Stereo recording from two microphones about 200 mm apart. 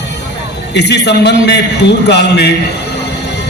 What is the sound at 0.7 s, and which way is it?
A man's voice, 55° left (ahead or behind).